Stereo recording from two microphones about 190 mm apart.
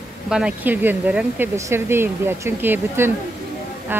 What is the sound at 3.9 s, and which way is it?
Music, 10° right (ahead or behind).